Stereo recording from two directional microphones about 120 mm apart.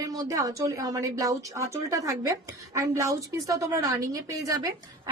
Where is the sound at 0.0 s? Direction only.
30° right (ahead or behind).